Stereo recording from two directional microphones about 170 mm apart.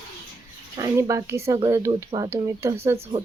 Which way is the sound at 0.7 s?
20° right (ahead or behind).